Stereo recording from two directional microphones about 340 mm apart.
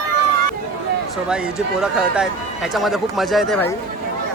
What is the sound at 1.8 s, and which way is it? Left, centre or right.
Speech, centre.